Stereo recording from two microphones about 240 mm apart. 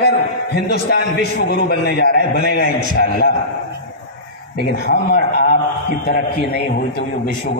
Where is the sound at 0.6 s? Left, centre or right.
Left.